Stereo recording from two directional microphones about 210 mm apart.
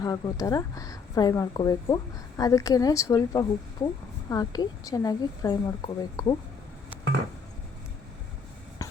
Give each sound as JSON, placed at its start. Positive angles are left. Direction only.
{"t": 0.0, "sound": "speech", "side_deg": 15}